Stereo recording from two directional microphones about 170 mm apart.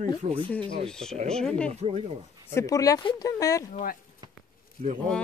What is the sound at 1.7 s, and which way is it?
Speech, 35° right (ahead or behind).